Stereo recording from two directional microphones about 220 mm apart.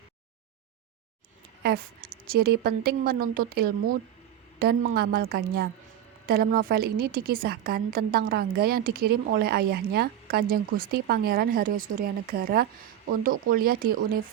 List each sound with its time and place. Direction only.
1.6 s a woman's voice: 45° right (ahead or behind)